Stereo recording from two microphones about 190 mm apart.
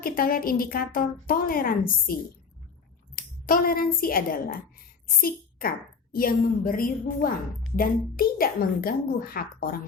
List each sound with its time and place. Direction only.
0.0 s a woman's voice: 50° left (ahead or behind)
3.2 s a woman's voice: 50° left (ahead or behind)